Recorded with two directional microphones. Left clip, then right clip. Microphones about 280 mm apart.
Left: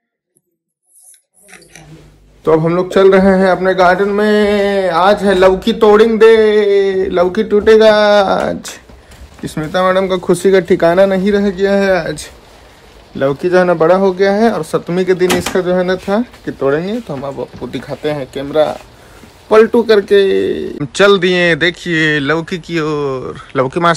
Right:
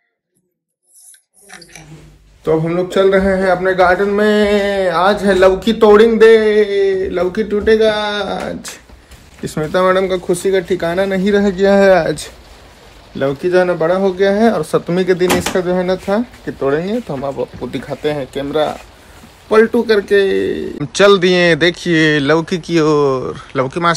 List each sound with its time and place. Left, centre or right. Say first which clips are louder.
2.4 s a man's voice: left 4 dB; centre
9.4 s a man's voice: even; centre
10.2 s speech: left 5 dB; left
11.3 s a man's voice: right 1 dB; centre
13.2 s a man's voice: left 2 dB; centre